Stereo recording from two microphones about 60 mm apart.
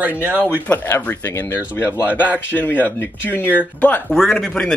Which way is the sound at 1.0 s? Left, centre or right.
Left.